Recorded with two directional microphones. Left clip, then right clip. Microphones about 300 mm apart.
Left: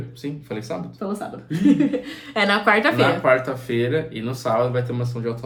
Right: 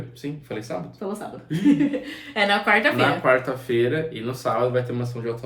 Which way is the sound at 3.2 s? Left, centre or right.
Centre.